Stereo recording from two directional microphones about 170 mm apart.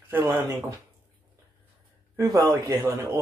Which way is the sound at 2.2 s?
20° right (ahead or behind).